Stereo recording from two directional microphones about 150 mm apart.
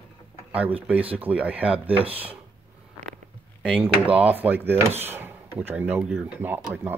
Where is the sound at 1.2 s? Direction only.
10° right (ahead or behind).